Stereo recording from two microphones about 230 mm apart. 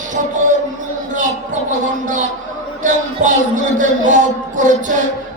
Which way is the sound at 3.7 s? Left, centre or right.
Right.